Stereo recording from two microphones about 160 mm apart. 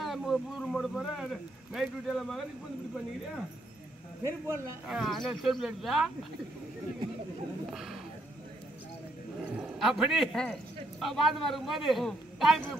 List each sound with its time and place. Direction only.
0.0 s speech: centre (ahead or behind)
4.2 s a man's voice: 20° right (ahead or behind)
4.8 s speech: centre (ahead or behind)
7.7 s speech: centre (ahead or behind)
9.6 s a man's voice: centre (ahead or behind)